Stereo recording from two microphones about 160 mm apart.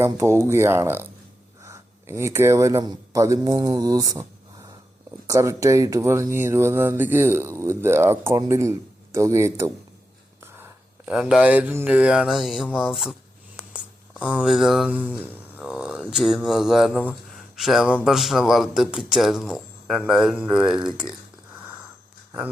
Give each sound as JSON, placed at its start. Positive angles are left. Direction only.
{"t": 0.0, "sound": "speech", "side_deg": -15}
{"t": 5.3, "sound": "speech", "side_deg": -20}
{"t": 17.1, "sound": "a sound", "side_deg": 0}
{"t": 18.0, "sound": "speech", "side_deg": 0}